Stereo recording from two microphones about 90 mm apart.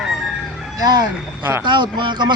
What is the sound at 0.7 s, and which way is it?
Speech, 50° right (ahead or behind).